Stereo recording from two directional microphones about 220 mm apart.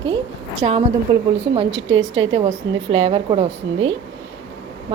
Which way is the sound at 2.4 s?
30° right (ahead or behind).